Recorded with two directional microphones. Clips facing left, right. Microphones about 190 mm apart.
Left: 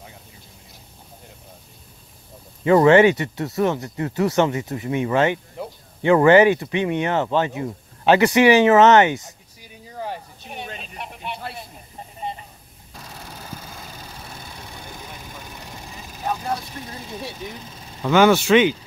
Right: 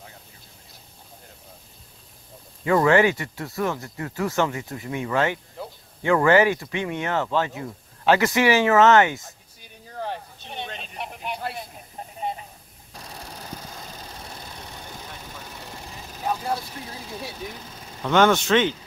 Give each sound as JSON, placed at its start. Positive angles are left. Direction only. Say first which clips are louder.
{"t": 2.6, "sound": "speech", "louder": "left 5 dB", "side_deg": 25}
{"t": 9.9, "sound": "a sound", "louder": "left 1 dB", "side_deg": 5}
{"t": 17.4, "sound": "speech", "louder": "left 1 dB", "side_deg": 0}